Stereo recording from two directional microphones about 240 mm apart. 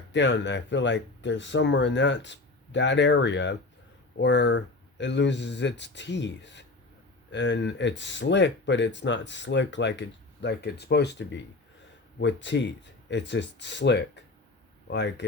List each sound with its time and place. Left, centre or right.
0.1 s speech: left